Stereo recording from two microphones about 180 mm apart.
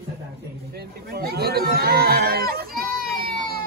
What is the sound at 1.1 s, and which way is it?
Speech, 60° right (ahead or behind).